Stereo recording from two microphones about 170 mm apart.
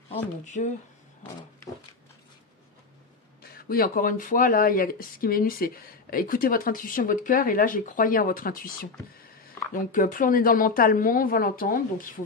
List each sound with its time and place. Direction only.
0.1 s speech: 45° left (ahead or behind)
3.5 s speech: 60° left (ahead or behind)
9.9 s speech: 50° left (ahead or behind)